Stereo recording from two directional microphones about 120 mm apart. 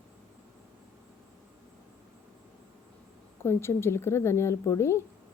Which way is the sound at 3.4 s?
20° left (ahead or behind).